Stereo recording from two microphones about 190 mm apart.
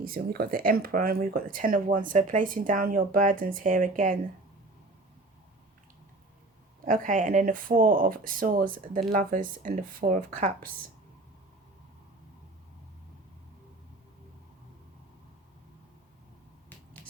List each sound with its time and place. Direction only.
0.0 s speech: 50° right (ahead or behind)
6.8 s speech: 45° right (ahead or behind)